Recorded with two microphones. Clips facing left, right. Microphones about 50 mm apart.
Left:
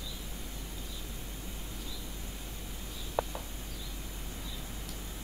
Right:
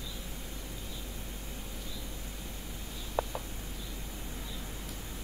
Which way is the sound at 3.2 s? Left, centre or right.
Centre.